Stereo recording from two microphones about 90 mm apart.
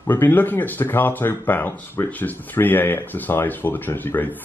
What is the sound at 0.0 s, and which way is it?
Speech, 25° left (ahead or behind).